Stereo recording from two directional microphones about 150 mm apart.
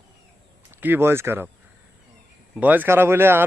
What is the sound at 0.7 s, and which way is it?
Speech, 15° right (ahead or behind).